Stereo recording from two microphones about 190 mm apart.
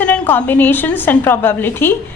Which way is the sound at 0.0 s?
10° left (ahead or behind).